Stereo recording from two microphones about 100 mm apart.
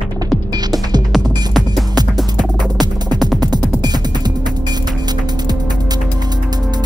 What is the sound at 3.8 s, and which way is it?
Music, 40° right (ahead or behind).